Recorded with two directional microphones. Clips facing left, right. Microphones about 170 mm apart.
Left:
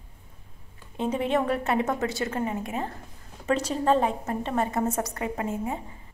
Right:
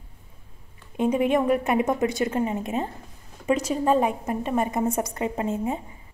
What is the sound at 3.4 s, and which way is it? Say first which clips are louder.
A woman's voice: right 2 dB; 10° right (ahead or behind).